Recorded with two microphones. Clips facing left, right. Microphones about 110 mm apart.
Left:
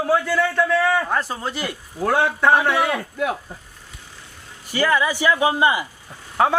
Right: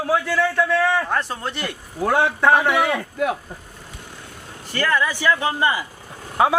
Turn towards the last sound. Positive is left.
turn(degrees=-10)  # may be behind; listen again after turning